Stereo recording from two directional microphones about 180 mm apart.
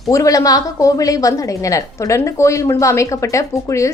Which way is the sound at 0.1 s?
20° left (ahead or behind).